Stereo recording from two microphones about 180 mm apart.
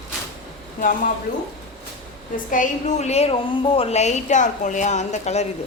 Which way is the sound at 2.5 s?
45° left (ahead or behind).